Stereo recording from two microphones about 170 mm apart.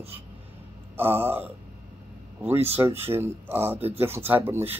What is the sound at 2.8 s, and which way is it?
Speech, 15° right (ahead or behind).